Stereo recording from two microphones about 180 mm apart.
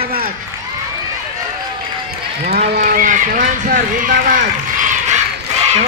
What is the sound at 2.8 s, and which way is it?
Run, 50° right (ahead or behind).